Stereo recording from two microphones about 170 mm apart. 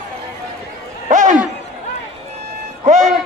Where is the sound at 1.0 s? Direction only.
45° right (ahead or behind).